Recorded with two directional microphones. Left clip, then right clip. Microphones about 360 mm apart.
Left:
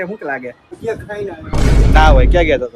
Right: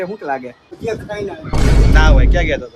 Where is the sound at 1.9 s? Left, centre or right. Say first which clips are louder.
Left 7 dB; centre.